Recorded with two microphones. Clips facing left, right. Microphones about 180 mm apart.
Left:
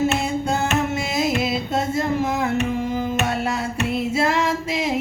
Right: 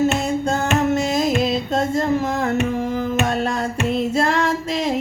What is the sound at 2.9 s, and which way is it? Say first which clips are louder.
Music: right 2 dB; 5° left (ahead or behind).